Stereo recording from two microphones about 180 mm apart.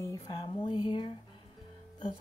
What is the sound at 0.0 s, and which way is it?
Speech, 20° left (ahead or behind).